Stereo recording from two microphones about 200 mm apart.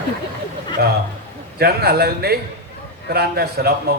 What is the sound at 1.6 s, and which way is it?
A man's voice, 50° right (ahead or behind).